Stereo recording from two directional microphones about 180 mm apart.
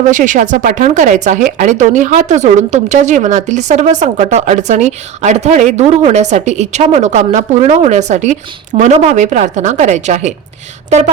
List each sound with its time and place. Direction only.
0.0 s speech: 45° right (ahead or behind)